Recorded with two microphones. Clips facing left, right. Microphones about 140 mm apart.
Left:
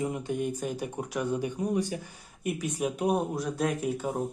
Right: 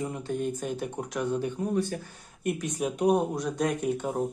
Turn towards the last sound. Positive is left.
turn(degrees=0)  # may be behind; listen again after turning